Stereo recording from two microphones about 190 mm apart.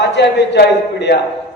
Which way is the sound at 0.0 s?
65° left (ahead or behind).